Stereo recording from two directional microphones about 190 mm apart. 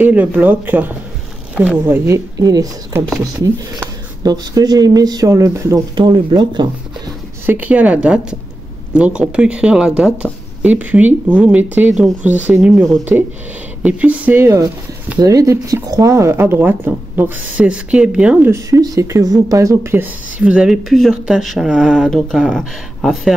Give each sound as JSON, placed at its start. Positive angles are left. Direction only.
{"t": 0.0, "sound": "speech", "side_deg": -10}
{"t": 7.4, "sound": "speech", "side_deg": -10}